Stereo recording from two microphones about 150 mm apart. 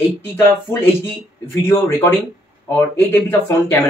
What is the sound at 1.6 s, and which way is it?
A man's voice, 15° left (ahead or behind).